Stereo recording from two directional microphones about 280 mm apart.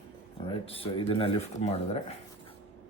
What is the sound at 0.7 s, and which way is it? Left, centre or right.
Speech, left.